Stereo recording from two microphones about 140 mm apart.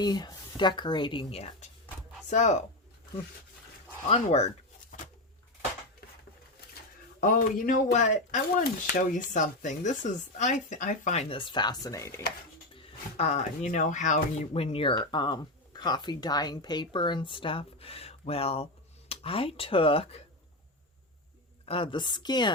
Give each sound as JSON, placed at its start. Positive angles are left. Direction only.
{"t": 0.0, "sound": "speech", "side_deg": 30}
{"t": 2.3, "sound": "speech", "side_deg": 60}
{"t": 4.1, "sound": "speech", "side_deg": 50}
{"t": 7.2, "sound": "speech", "side_deg": 70}
{"t": 8.9, "sound": "speech", "side_deg": 75}
{"t": 12.7, "sound": "speech", "side_deg": 45}
{"t": 14.5, "sound": "speech", "side_deg": 45}
{"t": 21.7, "sound": "speech", "side_deg": 40}